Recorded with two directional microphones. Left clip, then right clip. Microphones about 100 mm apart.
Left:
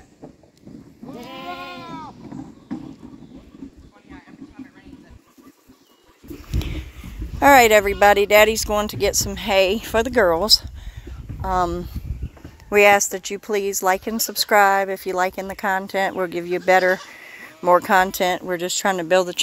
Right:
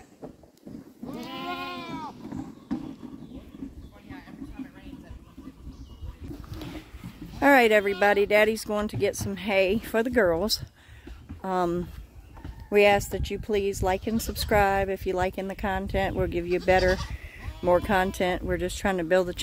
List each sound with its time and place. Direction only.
1.2 s goat: 10° left (ahead or behind)
7.3 s speech: 10° right (ahead or behind)
10.4 s speech: 25° right (ahead or behind)
11.4 s speech: 45° right (ahead or behind)
12.6 s speech: 10° right (ahead or behind)